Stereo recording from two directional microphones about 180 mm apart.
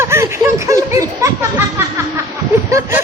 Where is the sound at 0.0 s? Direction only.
15° right (ahead or behind).